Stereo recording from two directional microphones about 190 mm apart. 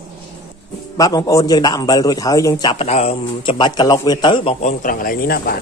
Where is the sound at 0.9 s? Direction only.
20° left (ahead or behind).